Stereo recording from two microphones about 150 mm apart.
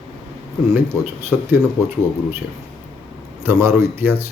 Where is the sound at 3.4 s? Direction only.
15° right (ahead or behind).